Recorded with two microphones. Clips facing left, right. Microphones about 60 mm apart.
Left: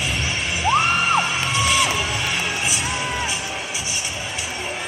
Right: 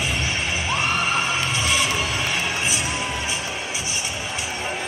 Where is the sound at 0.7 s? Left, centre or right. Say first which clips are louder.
Left 6 dB; left.